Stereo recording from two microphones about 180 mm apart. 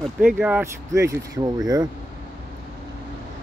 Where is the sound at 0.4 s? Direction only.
10° right (ahead or behind).